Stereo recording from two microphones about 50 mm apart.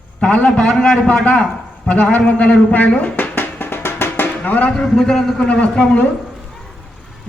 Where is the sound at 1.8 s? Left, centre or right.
Left.